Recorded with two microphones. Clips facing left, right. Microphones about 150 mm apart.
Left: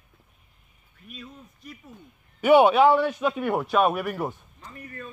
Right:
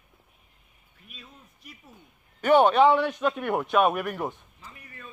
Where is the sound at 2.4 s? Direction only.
10° left (ahead or behind).